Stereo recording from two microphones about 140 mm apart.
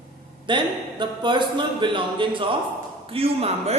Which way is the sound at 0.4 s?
35° right (ahead or behind).